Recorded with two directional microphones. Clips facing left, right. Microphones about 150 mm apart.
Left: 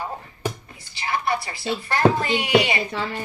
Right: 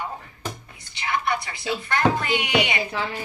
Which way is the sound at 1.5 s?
40° left (ahead or behind).